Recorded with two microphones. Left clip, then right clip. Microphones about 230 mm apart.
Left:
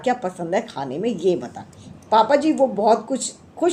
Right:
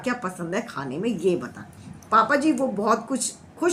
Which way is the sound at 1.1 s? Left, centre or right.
Right.